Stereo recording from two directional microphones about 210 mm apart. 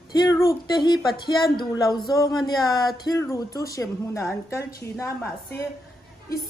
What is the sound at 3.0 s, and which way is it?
Speech, 15° left (ahead or behind).